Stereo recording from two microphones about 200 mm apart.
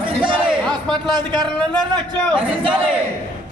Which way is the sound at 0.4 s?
5° left (ahead or behind).